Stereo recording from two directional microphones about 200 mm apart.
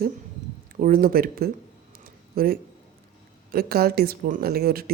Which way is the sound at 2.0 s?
50° right (ahead or behind).